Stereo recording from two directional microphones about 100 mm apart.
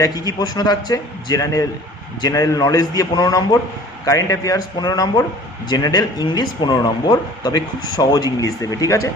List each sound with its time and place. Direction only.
0.0 s speech: 40° left (ahead or behind)